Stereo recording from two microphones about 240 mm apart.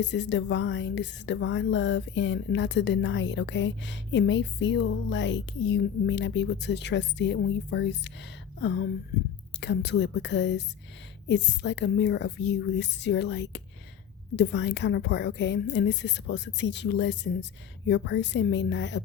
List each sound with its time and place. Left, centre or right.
0.0 s speech: left